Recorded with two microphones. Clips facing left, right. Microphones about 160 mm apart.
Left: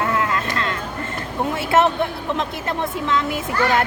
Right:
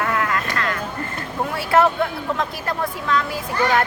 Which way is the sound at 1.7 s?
20° left (ahead or behind).